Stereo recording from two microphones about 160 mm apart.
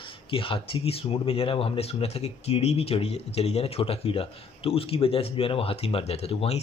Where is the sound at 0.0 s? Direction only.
35° left (ahead or behind).